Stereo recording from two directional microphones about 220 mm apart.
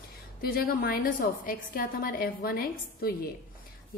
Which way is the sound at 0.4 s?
45° left (ahead or behind).